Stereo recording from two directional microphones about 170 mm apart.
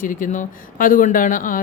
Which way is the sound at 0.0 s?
55° left (ahead or behind).